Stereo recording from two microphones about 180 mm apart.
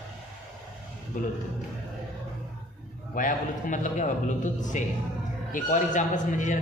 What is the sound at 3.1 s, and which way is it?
A man's voice, 45° left (ahead or behind).